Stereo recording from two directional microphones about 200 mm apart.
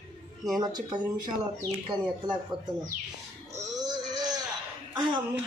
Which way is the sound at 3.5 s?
20° right (ahead or behind).